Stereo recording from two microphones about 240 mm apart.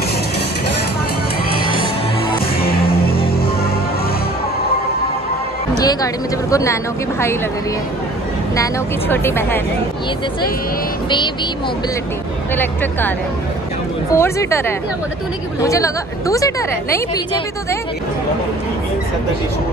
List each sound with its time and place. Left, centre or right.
2.6 s music: left
5.8 s music: centre
6.5 s a woman's voice: centre
9.1 s a woman's voice: centre
14.1 s a woman's voice: centre